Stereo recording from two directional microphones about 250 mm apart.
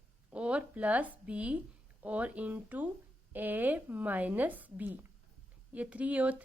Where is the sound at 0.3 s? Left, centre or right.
Centre.